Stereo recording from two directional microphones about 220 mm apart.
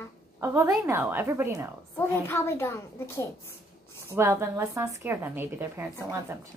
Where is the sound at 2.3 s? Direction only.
10° left (ahead or behind).